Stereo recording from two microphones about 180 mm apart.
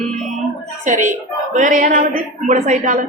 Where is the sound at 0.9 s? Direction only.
45° right (ahead or behind).